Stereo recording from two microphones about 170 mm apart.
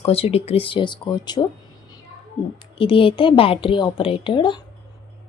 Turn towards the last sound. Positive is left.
turn(degrees=25)  # may be behind; listen again after turning